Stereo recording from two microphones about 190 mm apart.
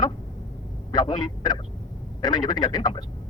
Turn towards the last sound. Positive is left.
turn(degrees=20)  # may be behind; listen again after turning